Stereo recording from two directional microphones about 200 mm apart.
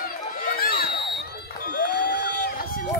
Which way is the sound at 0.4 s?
50° left (ahead or behind).